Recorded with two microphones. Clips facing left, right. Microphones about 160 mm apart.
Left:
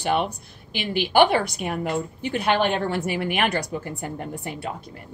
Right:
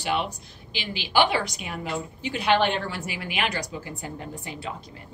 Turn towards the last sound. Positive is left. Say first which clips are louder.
# left 4 dB
turn(degrees=55)  # may be behind; listen again after turning